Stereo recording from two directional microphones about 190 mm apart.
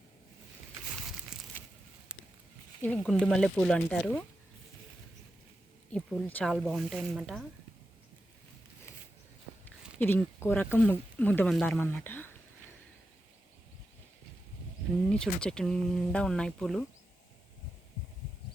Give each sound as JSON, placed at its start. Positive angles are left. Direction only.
{"t": 2.1, "sound": "a sound", "side_deg": -5}
{"t": 2.8, "sound": "speech", "side_deg": 5}
{"t": 5.9, "sound": "speech", "side_deg": 5}
{"t": 10.0, "sound": "speech", "side_deg": 10}
{"t": 15.1, "sound": "speech", "side_deg": 5}